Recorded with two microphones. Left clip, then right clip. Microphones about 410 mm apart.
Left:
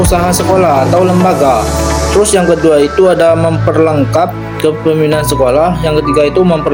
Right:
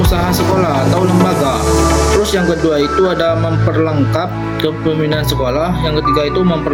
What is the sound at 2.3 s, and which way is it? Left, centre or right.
Speech, right.